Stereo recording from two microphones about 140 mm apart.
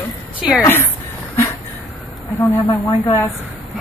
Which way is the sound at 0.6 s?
15° left (ahead or behind).